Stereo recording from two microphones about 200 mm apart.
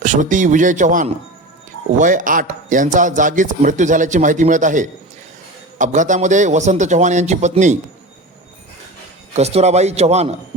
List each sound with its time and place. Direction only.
0.0 s a man's voice: 40° right (ahead or behind)
9.3 s a man's voice: 30° right (ahead or behind)